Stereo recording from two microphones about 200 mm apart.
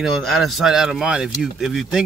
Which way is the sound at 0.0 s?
Centre (ahead or behind).